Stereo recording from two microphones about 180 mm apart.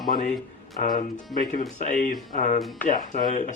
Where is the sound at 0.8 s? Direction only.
45° left (ahead or behind).